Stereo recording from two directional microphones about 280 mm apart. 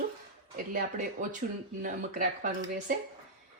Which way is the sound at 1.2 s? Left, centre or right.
Right.